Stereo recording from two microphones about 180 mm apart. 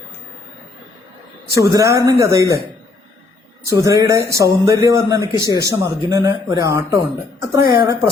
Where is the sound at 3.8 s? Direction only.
20° right (ahead or behind).